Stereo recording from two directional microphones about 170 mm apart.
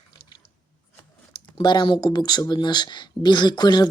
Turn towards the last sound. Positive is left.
turn(degrees=25)  # may be behind; listen again after turning